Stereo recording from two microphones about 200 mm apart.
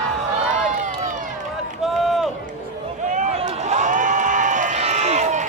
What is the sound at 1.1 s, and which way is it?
Run, 40° right (ahead or behind).